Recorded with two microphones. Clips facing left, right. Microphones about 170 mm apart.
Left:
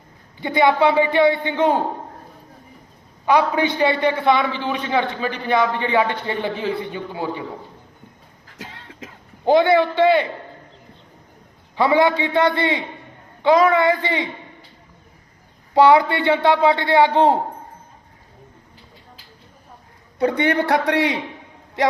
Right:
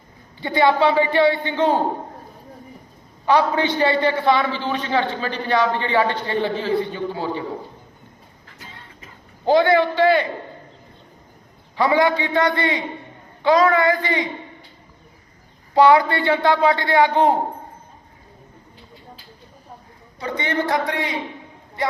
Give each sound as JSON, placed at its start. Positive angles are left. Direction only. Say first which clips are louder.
{"t": 0.4, "sound": "a man's voice", "louder": "left 1 dB", "side_deg": 15}
{"t": 3.2, "sound": "a man's voice", "louder": "even", "side_deg": 10}
{"t": 8.5, "sound": "a sound", "louder": "left 6 dB", "side_deg": 90}
{"t": 9.5, "sound": "a man's voice", "louder": "left 1 dB", "side_deg": 20}
{"t": 11.8, "sound": "a man's voice", "louder": "left 1 dB", "side_deg": 20}
{"t": 15.7, "sound": "a man's voice", "louder": "left 1 dB", "side_deg": 20}
{"t": 20.1, "sound": "a man's voice", "louder": "left 7 dB", "side_deg": 60}
{"t": 20.7, "sound": "a man's voice", "louder": "left 4 dB", "side_deg": 70}
{"t": 21.8, "sound": "a man's voice", "louder": "left 4 dB", "side_deg": 90}